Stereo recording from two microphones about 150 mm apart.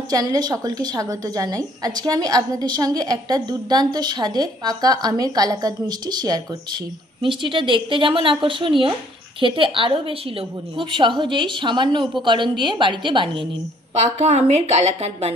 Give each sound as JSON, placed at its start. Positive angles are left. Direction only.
{"t": 0.1, "sound": "a woman's voice", "side_deg": -25}
{"t": 7.4, "sound": "a woman's voice", "side_deg": -35}
{"t": 13.9, "sound": "a woman's voice", "side_deg": -50}